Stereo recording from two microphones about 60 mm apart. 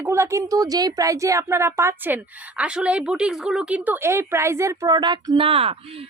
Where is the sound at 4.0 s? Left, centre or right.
Right.